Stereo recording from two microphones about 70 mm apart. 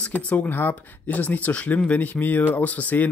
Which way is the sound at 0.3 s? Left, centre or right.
Left.